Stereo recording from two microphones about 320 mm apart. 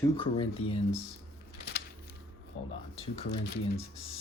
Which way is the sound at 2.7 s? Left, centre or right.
Centre.